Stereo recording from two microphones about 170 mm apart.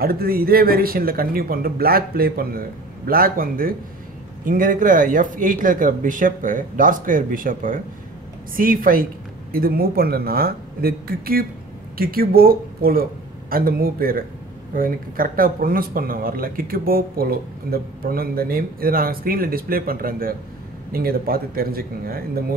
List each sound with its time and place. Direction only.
0.0 s speech: 60° right (ahead or behind)